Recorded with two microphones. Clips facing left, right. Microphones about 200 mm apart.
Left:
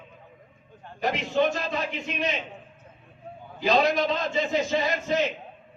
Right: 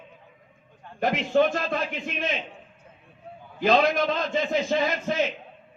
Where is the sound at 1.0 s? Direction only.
50° right (ahead or behind).